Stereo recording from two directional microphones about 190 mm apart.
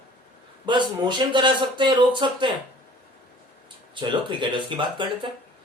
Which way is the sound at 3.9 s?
25° right (ahead or behind).